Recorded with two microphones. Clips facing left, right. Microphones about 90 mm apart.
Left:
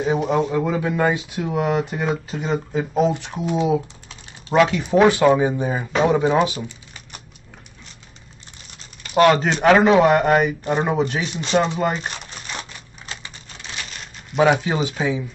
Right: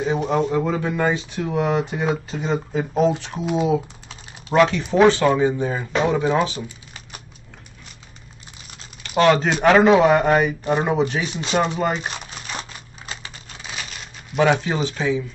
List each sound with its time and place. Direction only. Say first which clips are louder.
0.0 s speech: left 1 dB; 5° left (ahead or behind)
3.7 s typing: even; centre (ahead or behind)
4.6 s speech: even; 10° left (ahead or behind)
9.0 s speech: left 1 dB; centre (ahead or behind)
14.3 s speech: left 1 dB; 5° left (ahead or behind)